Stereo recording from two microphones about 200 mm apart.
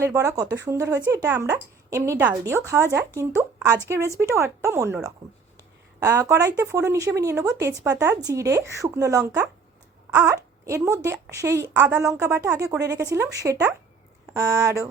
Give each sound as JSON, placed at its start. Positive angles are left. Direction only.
{"t": 0.0, "sound": "speech", "side_deg": -15}